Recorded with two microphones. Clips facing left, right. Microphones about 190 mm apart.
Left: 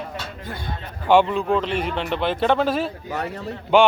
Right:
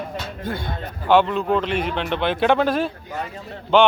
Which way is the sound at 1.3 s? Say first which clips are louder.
Right 1 dB; 5° right (ahead or behind).